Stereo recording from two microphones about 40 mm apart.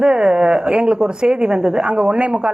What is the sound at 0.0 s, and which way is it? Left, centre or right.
Speech, right.